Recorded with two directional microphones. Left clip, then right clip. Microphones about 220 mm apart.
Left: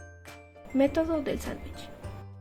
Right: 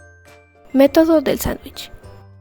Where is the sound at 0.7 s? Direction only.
50° right (ahead or behind).